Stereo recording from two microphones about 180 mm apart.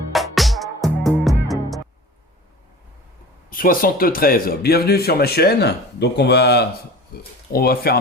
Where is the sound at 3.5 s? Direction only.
50° left (ahead or behind).